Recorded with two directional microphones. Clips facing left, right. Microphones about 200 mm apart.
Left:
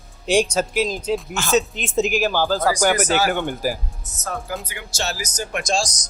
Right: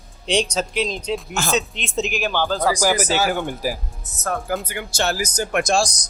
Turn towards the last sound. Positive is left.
turn(degrees=-60)  # may be behind; listen again after turning